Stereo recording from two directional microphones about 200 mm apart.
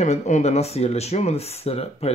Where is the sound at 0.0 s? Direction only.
35° left (ahead or behind).